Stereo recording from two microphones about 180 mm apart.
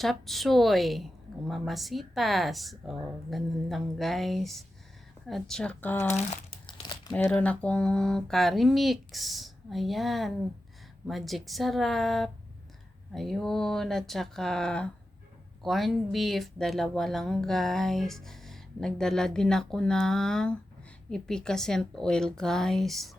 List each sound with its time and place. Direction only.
0.0 s speech: centre (ahead or behind)
6.3 s crumpling: 30° left (ahead or behind)
7.1 s speech: 5° left (ahead or behind)